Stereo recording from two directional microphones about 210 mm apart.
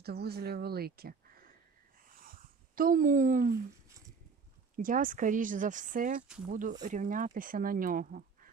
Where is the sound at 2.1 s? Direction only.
40° right (ahead or behind).